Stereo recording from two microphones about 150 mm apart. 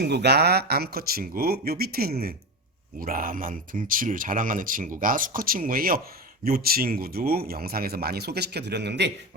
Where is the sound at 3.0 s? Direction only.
70° right (ahead or behind).